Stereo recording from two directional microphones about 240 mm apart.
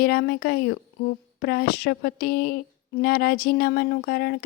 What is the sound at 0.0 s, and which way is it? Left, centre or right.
Speech, left.